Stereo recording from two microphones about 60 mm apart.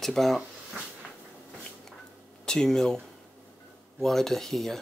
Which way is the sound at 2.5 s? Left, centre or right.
Centre.